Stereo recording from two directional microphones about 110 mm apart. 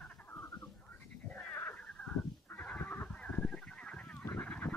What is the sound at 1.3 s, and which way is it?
Neigh, 10° left (ahead or behind).